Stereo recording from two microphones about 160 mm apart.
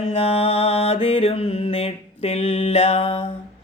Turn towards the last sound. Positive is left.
turn(degrees=40)  # may be behind; listen again after turning